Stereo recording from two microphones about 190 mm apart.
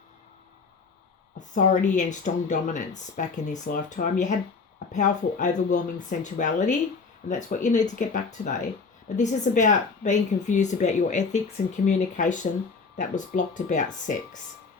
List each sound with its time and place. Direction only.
1.4 s a woman's voice: 45° left (ahead or behind)